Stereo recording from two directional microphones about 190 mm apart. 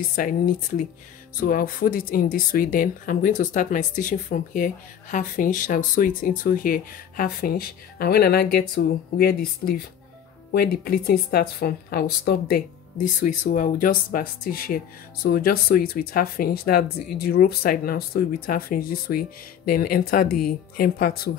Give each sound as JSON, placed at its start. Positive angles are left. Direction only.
{"t": 0.1, "sound": "speech", "side_deg": 45}
{"t": 13.0, "sound": "speech", "side_deg": 40}